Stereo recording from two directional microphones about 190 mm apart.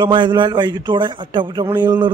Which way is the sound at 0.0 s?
25° right (ahead or behind).